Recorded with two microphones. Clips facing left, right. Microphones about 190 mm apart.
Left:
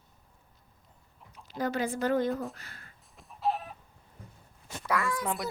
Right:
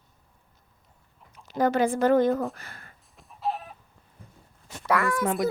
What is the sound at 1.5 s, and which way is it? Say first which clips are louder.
A woman's voice: right 8 dB; 90° right.